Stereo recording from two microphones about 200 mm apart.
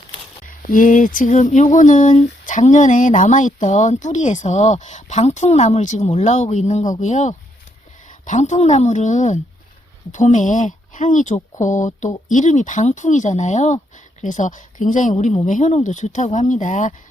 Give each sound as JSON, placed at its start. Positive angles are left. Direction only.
{"t": 0.4, "sound": "speech", "side_deg": 40}